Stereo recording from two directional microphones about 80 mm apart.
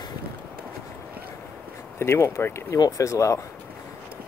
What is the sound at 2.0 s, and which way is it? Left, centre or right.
Speech, left.